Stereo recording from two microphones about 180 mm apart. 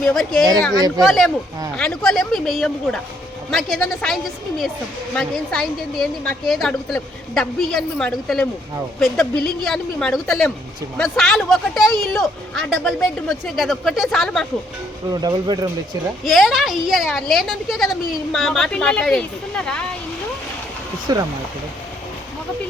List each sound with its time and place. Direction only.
0.0 s a woman's voice: 5° left (ahead or behind)
15.1 s speech: 20° right (ahead or behind)
16.2 s a woman's voice: centre (ahead or behind)
21.1 s speech: 25° right (ahead or behind)